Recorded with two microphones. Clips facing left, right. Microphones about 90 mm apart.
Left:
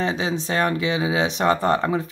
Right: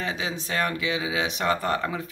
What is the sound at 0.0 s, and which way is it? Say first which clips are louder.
Speech: left 7 dB; 30° left (ahead or behind).